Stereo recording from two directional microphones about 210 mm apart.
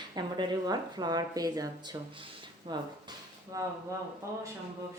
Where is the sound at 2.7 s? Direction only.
20° right (ahead or behind).